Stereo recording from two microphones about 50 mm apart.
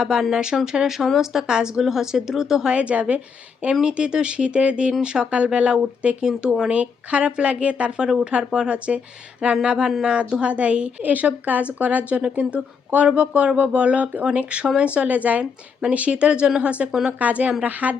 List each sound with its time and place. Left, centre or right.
0.0 s speech: centre
2.7 s a woman's voice: right
10.5 s a woman's voice: right